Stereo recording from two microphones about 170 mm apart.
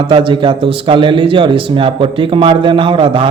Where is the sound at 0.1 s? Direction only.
30° right (ahead or behind).